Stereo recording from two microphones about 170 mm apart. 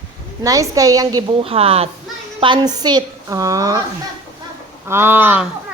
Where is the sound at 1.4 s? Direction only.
35° right (ahead or behind).